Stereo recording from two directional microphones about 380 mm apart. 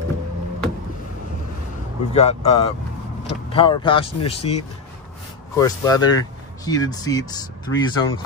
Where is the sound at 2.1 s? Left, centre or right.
Centre.